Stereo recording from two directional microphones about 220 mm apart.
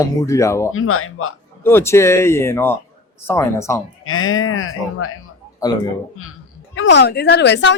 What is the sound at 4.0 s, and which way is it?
Speech, 70° left (ahead or behind).